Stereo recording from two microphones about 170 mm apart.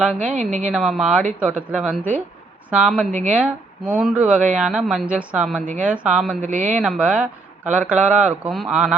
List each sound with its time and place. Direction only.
0.2 s a woman's voice: 50° right (ahead or behind)
0.7 s a woman's voice: 5° right (ahead or behind)
3.1 s a woman's voice: 50° right (ahead or behind)
3.3 s speech: 5° right (ahead or behind)
6.5 s a woman's voice: 50° right (ahead or behind)
6.8 s speech: 5° right (ahead or behind)